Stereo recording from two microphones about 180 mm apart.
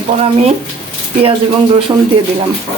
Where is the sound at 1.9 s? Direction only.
20° right (ahead or behind).